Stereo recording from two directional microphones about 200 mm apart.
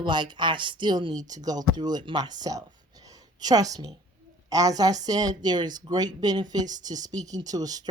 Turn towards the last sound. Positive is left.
turn(degrees=-20)  # may be behind; listen again after turning